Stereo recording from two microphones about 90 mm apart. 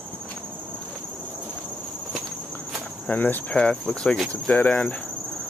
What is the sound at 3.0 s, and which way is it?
Cricket, 20° left (ahead or behind).